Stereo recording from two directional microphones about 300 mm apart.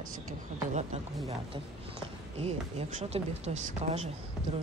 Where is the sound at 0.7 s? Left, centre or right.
Right.